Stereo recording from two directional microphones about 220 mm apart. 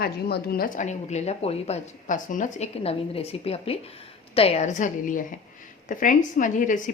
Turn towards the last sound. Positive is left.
turn(degrees=35)  # may be behind; listen again after turning